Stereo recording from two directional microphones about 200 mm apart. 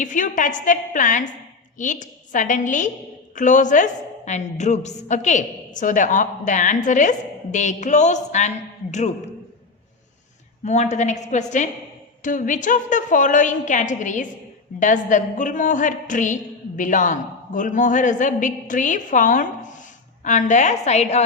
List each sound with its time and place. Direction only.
0.0 s a woman's voice: 40° left (ahead or behind)
10.6 s a woman's voice: 35° left (ahead or behind)